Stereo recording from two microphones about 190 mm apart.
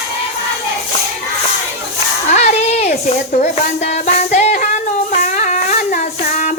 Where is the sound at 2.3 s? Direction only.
35° left (ahead or behind).